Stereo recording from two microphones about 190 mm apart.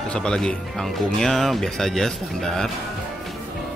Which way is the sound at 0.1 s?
5° left (ahead or behind).